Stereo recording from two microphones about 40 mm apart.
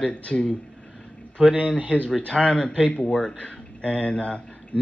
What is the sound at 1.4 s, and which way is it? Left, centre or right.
Speech, right.